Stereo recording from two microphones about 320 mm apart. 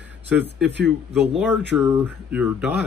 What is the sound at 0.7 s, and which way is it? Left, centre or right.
Speech, right.